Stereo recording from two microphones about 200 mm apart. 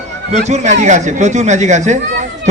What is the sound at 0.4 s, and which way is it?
A man's voice, 35° right (ahead or behind).